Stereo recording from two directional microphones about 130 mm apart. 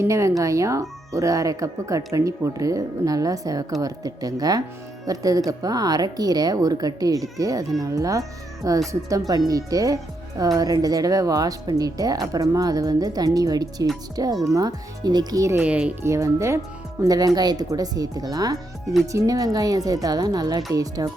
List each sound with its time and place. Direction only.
0.0 s speech: 20° right (ahead or behind)
15.6 s speech: 10° right (ahead or behind)
16.0 s speech: 20° right (ahead or behind)